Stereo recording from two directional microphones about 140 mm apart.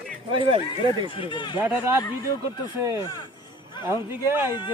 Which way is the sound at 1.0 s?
40° left (ahead or behind).